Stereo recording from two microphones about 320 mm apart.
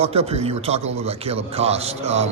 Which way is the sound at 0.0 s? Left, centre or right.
Centre.